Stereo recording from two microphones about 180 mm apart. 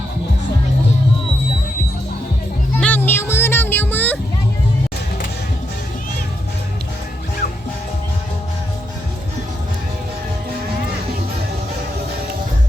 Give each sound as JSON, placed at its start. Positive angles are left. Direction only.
{"t": 2.7, "sound": "children playing", "side_deg": 10}